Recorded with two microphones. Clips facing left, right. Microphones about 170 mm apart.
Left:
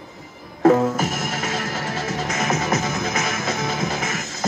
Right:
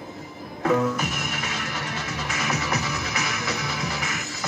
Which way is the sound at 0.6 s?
45° left (ahead or behind).